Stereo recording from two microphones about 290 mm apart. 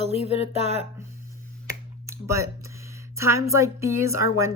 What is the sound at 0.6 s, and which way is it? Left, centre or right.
Speech, right.